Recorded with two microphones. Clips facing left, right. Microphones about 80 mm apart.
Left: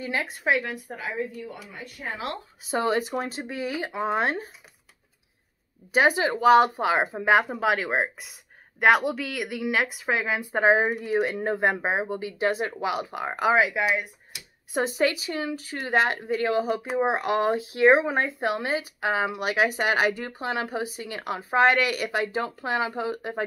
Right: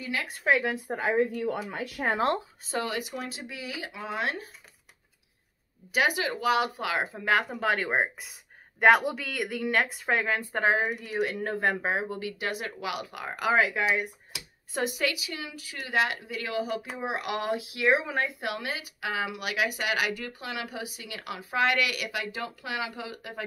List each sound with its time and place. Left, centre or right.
0.0 s speech: left
0.5 s speech: centre
0.9 s speech: right
2.8 s speech: left
5.9 s speech: left
7.1 s speech: left
7.6 s speech: centre
10.8 s speech: left; by 14.0 s centre
14.7 s speech: left